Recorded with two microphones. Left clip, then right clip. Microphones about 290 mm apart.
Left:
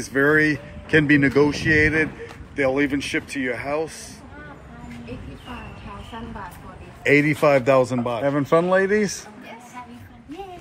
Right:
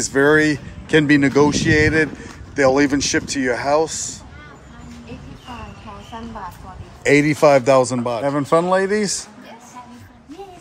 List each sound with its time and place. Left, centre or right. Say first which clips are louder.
0.0 s a man's voice: right 3 dB; centre
7.0 s a man's voice: right 3 dB; centre